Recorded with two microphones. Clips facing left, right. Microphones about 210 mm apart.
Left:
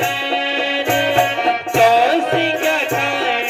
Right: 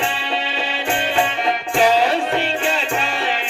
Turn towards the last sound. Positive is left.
turn(degrees=70)  # may be behind; listen again after turning